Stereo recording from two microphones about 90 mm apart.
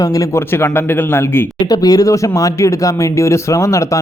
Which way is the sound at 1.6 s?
45° left (ahead or behind).